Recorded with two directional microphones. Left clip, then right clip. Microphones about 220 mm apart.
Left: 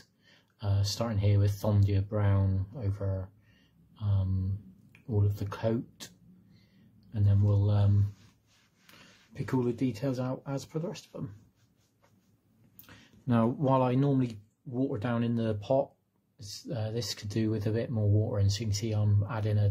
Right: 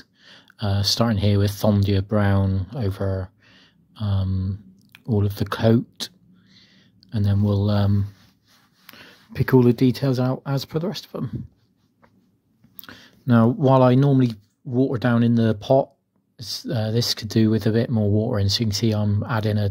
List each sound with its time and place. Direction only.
0.2 s speech: 30° right (ahead or behind)
4.9 s a sound: 30° right (ahead or behind)
8.8 s speech: 35° right (ahead or behind)
12.8 s speech: 30° right (ahead or behind)